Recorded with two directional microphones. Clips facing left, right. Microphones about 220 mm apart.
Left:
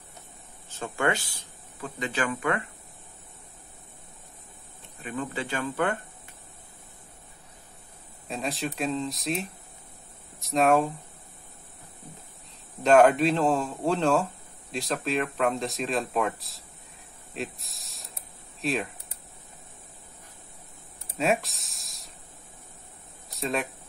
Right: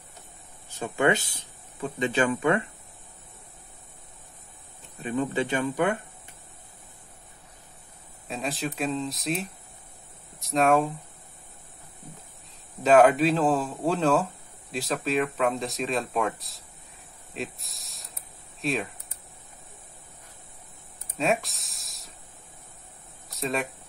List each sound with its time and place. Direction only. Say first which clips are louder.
0.7 s speech: right 4 dB; 15° right (ahead or behind)
5.0 s speech: right 6 dB; 25° right (ahead or behind)
8.3 s speech: even; centre (ahead or behind)
12.8 s speech: even; centre (ahead or behind)
17.3 s spray: even; centre (ahead or behind)
18.6 s speech: even; centre (ahead or behind)
21.2 s speech: even; centre (ahead or behind)
23.3 s speech: even; centre (ahead or behind)